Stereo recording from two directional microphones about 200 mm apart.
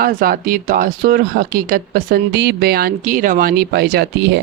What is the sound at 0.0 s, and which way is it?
Speech, 45° right (ahead or behind).